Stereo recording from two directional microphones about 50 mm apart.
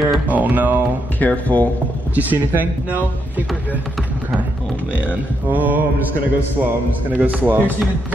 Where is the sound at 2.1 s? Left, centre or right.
Right.